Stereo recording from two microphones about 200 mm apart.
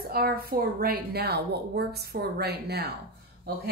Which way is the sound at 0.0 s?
50° right (ahead or behind).